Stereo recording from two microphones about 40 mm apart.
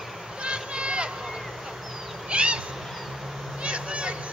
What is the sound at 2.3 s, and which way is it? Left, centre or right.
Owl, right.